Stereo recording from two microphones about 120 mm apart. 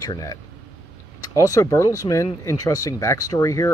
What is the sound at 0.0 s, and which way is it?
Speech, 30° left (ahead or behind).